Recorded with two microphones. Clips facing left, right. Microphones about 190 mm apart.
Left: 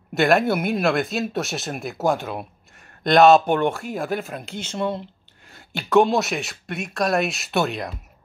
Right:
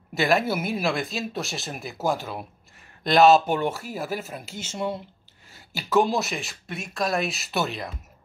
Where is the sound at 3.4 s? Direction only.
65° left (ahead or behind).